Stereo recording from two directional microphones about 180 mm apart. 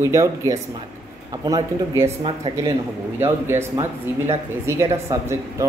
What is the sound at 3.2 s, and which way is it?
Speech, 15° right (ahead or behind).